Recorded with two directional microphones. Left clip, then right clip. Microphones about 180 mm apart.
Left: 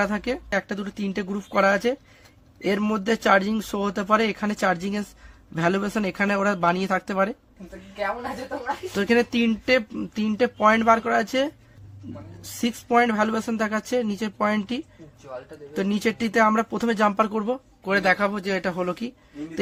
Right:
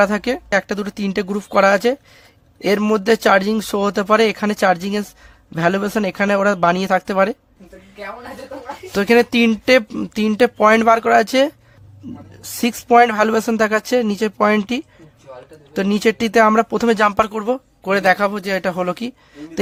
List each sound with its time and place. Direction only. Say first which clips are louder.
0.0 s speech: right 9 dB; 35° right (ahead or behind)
9.0 s speech: right 8 dB; 40° right (ahead or behind)
12.6 s speech: right 9 dB; 40° right (ahead or behind)